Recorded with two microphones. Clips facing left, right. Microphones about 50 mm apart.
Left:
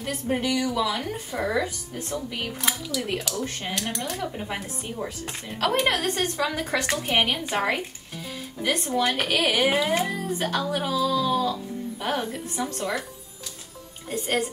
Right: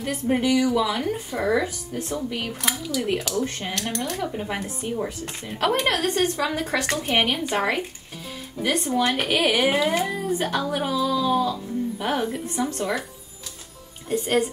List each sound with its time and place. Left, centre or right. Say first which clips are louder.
0.0 s speech: right 4 dB; centre
2.7 s speech: right 6 dB; centre
3.3 s speech: right 5 dB; centre
3.6 s a woman's voice: right 2 dB; centre
14.0 s a woman's voice: right 4 dB; centre